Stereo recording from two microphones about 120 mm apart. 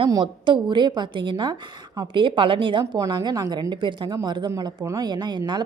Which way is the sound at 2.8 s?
30° right (ahead or behind).